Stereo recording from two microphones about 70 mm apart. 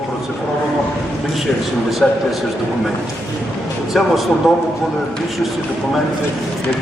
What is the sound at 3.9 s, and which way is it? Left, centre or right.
Speech, centre.